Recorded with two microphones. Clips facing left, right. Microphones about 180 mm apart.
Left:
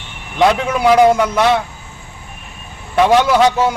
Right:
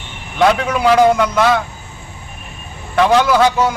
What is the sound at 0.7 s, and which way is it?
Speech, 10° left (ahead or behind).